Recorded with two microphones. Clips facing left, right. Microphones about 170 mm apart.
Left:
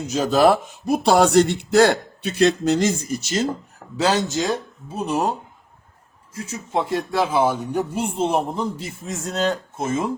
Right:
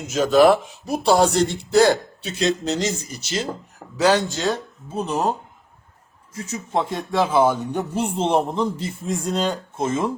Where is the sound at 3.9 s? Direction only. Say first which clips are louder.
Right 2 dB; 25° left (ahead or behind).